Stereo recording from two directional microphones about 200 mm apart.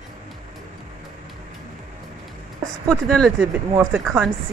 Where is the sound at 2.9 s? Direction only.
5° left (ahead or behind).